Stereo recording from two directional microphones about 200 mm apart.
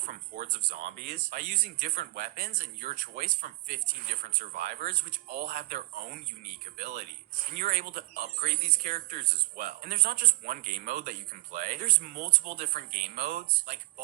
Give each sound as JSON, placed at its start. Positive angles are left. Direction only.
{"t": 0.0, "sound": "speech", "side_deg": -45}